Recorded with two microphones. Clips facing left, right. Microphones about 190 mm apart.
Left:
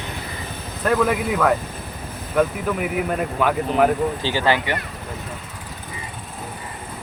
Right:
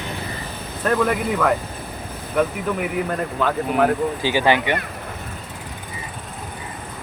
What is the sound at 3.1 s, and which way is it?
Speech, 5° left (ahead or behind).